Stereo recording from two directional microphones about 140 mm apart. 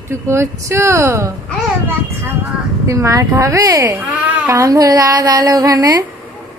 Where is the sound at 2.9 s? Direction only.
20° right (ahead or behind).